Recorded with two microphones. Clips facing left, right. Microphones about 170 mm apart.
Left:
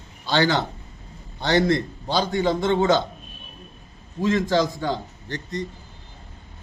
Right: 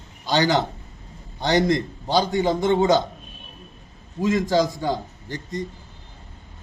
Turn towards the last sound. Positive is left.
turn(degrees=-10)  # may be behind; listen again after turning